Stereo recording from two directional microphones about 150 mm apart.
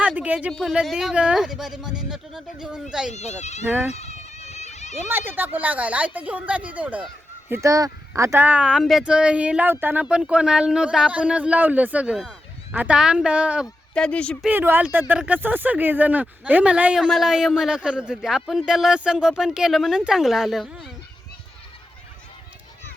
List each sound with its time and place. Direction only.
0.0 s speech: 10° right (ahead or behind)
3.1 s speech: 50° left (ahead or behind)
3.7 s speech: 15° right (ahead or behind)
3.9 s a sound: 45° left (ahead or behind)
5.0 s speech: 15° right (ahead or behind)
7.5 s speech: 20° right (ahead or behind)
13.9 s speech: 5° left (ahead or behind)
14.4 s speech: 15° right (ahead or behind)